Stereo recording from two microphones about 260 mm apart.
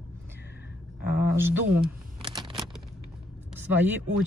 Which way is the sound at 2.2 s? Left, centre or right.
Centre.